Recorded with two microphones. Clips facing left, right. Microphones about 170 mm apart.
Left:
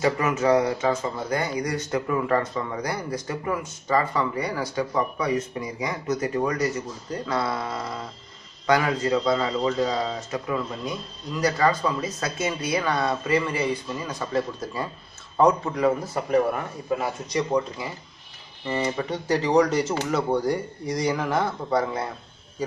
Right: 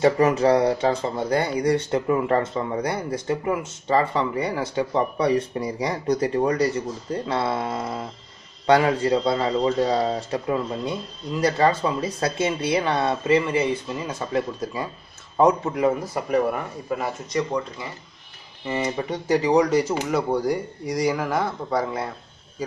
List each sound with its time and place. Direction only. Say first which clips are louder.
0.0 s speech: right 5 dB; 35° right (ahead or behind)
17.0 s speech: right 1 dB; 5° left (ahead or behind)
18.7 s speech: right 1 dB; 15° right (ahead or behind); by 22.0 s centre (ahead or behind)